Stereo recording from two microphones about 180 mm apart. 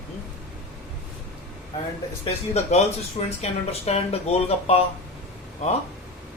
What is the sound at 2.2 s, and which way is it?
Speech, 35° left (ahead or behind).